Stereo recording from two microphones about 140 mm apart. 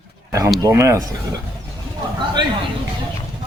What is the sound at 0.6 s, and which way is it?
Speech, 20° right (ahead or behind).